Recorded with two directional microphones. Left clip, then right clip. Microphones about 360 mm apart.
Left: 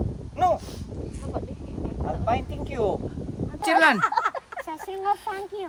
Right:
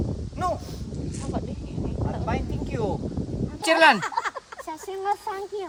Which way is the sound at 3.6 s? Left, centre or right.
Centre.